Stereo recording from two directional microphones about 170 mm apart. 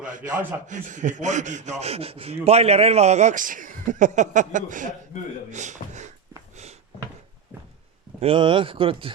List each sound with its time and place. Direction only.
0.0 s speech: 50° right (ahead or behind)
8.2 s speech: 30° right (ahead or behind)